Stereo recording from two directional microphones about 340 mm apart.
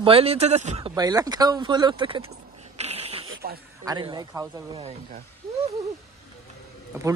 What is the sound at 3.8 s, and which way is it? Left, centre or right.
Speech, centre.